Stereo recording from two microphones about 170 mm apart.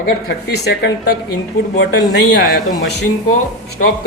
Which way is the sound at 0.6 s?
75° left (ahead or behind).